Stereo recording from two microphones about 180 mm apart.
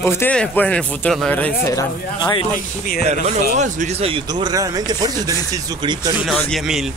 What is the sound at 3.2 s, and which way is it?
Speech, 40° right (ahead or behind).